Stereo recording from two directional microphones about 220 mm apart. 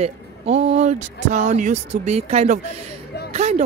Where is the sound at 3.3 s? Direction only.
30° right (ahead or behind).